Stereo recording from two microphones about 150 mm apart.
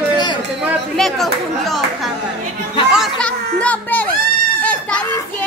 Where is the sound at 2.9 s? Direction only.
Centre (ahead or behind).